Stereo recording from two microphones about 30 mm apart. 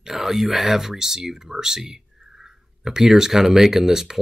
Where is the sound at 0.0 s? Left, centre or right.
Centre.